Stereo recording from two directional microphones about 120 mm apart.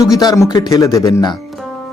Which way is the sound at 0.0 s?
30° left (ahead or behind).